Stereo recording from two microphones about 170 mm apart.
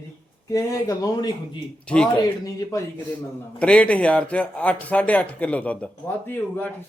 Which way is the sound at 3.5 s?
5° left (ahead or behind).